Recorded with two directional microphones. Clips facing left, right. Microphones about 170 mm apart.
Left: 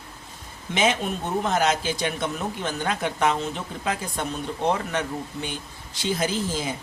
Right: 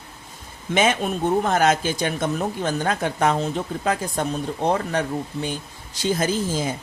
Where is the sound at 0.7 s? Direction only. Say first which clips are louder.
Right 3 dB; 50° right (ahead or behind).